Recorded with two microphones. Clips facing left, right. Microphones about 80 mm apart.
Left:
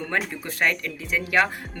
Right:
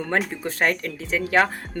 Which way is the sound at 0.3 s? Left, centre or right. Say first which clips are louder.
Right 2 dB; right.